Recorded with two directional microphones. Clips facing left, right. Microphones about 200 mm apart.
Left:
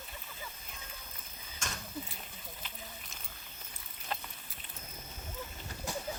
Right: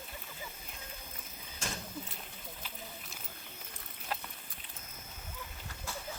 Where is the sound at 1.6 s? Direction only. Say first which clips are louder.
Right 2 dB; 35° right (ahead or behind).